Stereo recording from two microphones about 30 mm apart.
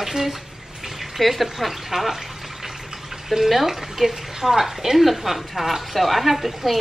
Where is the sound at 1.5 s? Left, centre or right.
Centre.